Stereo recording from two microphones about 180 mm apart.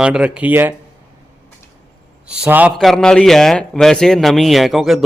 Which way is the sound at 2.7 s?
5° left (ahead or behind).